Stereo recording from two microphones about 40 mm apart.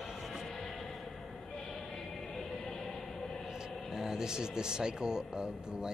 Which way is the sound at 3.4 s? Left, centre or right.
Centre.